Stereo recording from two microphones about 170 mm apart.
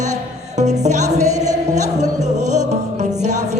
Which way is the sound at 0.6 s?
45° right (ahead or behind).